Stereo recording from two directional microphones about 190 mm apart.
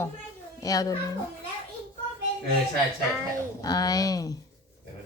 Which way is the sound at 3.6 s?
20° left (ahead or behind).